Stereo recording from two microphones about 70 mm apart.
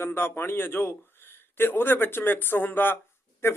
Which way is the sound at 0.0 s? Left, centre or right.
Left.